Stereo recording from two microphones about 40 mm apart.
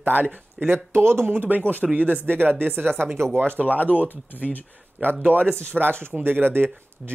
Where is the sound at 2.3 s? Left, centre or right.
Right.